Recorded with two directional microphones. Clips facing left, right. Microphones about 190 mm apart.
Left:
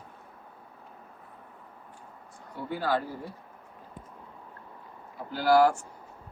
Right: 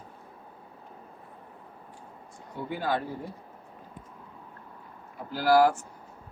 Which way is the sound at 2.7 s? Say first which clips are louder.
Left 1 dB; 15° right (ahead or behind).